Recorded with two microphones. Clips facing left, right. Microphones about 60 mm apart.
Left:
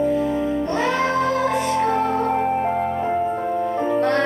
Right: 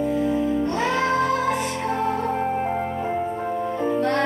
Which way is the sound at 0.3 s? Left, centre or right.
Left.